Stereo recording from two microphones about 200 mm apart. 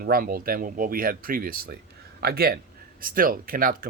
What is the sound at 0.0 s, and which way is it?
Speech, 45° right (ahead or behind).